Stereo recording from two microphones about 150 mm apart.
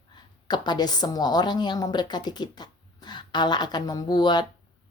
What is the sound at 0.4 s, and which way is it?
Speech, 30° left (ahead or behind).